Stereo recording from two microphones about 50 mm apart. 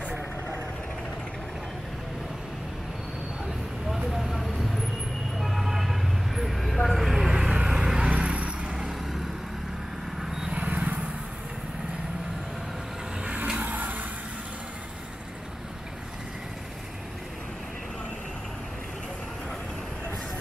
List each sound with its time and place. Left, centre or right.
4.1 s vehicle: centre; by 8.7 s right
8.7 s vehicle: centre
10.5 s vehicle: right
13.7 s vehicle: right